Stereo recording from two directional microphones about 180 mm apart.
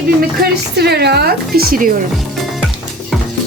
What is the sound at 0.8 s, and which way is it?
Speech, 65° right (ahead or behind).